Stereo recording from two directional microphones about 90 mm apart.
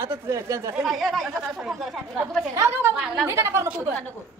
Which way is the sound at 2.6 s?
30° right (ahead or behind).